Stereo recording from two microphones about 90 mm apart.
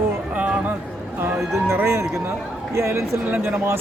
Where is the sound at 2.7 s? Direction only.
30° right (ahead or behind).